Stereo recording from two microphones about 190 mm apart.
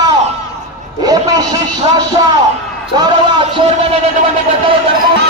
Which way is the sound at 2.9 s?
20° right (ahead or behind).